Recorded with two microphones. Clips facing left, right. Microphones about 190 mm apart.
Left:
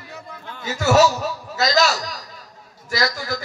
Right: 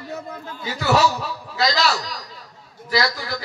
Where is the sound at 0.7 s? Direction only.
45° left (ahead or behind).